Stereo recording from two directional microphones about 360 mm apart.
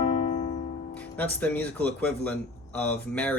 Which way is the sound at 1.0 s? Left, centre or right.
Centre.